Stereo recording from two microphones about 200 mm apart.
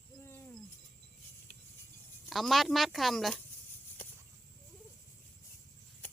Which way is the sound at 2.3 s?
Centre (ahead or behind).